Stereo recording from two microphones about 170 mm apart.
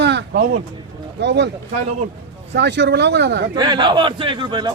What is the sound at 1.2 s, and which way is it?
Speech, 90° right.